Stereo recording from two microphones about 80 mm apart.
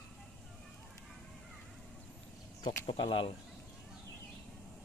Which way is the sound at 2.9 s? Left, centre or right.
Left.